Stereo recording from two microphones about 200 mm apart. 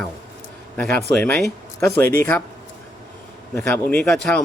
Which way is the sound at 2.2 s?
5° left (ahead or behind).